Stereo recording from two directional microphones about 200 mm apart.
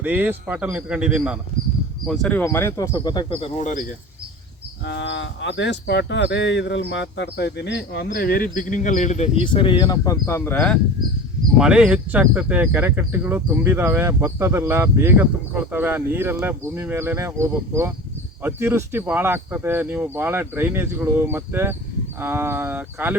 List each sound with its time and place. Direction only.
0.0 s speech: 10° right (ahead or behind)
2.0 s speech: 5° left (ahead or behind); by 3.8 s 35° left (ahead or behind)
4.9 s speech: 65° left (ahead or behind); by 9.5 s 35° left (ahead or behind)
9.5 s speech: 25° left (ahead or behind); by 10.8 s 5° left (ahead or behind)
11.5 s speech: 5° right (ahead or behind)